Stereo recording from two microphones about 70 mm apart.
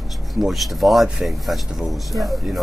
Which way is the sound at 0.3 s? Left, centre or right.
Centre.